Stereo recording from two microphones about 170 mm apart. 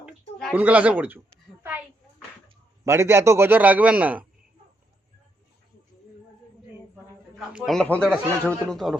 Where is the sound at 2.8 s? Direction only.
15° right (ahead or behind).